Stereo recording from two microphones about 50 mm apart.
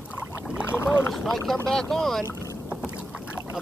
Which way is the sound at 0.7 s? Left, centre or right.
Left.